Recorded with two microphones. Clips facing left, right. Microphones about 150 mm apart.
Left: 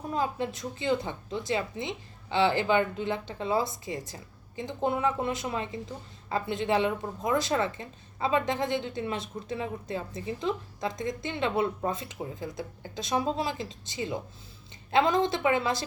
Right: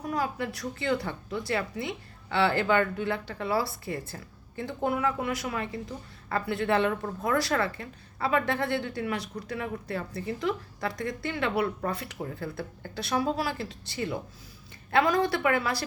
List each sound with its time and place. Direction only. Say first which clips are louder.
0.0 s a woman's voice: even; 25° left (ahead or behind)